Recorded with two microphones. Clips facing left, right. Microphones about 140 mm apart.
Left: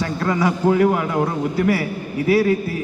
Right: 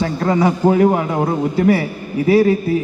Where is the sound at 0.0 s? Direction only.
25° right (ahead or behind).